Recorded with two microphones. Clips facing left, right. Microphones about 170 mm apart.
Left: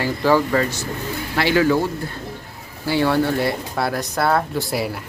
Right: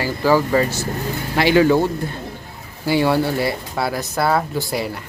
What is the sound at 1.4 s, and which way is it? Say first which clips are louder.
Speech: right 3 dB; 20° right (ahead or behind).